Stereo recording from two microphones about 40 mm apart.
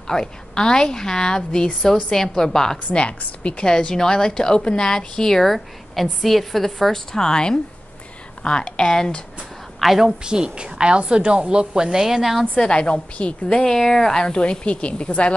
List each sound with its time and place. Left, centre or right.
0.0 s speech: centre
2.9 s a woman's voice: left
3.6 s speech: centre
9.8 s a woman's voice: centre
10.2 s a woman's voice: centre
12.5 s a woman's voice: left
13.7 s a woman's voice: centre; by 15.3 s left